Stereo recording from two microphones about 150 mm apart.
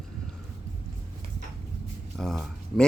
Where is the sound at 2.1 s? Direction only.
Centre (ahead or behind).